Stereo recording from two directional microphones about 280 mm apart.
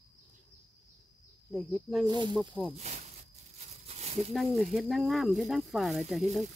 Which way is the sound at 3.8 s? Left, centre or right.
Right.